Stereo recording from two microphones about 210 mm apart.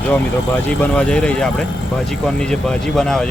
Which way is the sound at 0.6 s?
5° left (ahead or behind).